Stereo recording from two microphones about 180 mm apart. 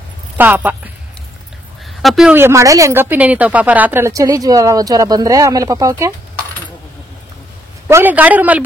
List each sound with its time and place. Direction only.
0.4 s speech: 10° right (ahead or behind)
2.0 s speech: centre (ahead or behind)
2.3 s speech: 15° right (ahead or behind)
7.9 s speech: 10° right (ahead or behind)